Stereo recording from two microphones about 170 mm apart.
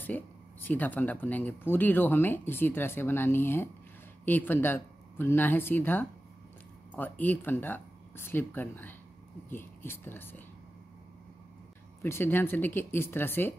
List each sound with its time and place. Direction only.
0.0 s speech: 10° left (ahead or behind)
12.0 s speech: 15° left (ahead or behind)